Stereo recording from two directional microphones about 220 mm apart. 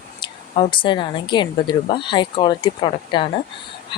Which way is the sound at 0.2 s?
25° left (ahead or behind).